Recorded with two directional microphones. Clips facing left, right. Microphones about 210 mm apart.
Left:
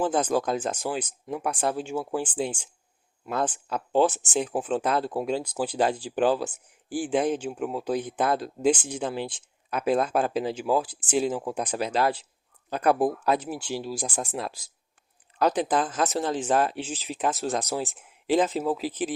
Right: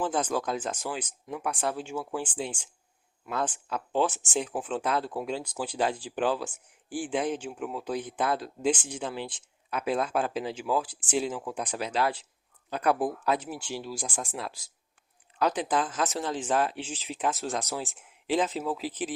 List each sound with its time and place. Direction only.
0.0 s speech: 40° left (ahead or behind)